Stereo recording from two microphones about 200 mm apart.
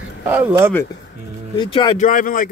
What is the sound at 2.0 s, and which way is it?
Speech, 40° left (ahead or behind).